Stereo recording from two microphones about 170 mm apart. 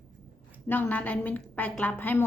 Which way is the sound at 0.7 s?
10° left (ahead or behind).